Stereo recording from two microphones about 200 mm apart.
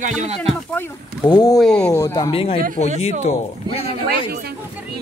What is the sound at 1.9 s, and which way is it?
Speech, 20° left (ahead or behind).